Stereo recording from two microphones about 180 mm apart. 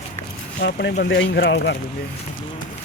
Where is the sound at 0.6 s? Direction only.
65° left (ahead or behind); by 1.8 s 80° left.